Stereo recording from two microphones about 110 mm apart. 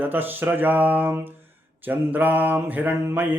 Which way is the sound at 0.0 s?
15° right (ahead or behind).